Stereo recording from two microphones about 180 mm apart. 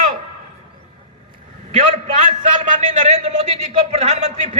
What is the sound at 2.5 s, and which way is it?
A man's voice, 45° right (ahead or behind).